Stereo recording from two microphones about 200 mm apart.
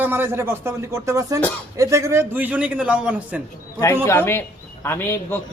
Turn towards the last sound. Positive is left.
turn(degrees=10)  # may be behind; listen again after turning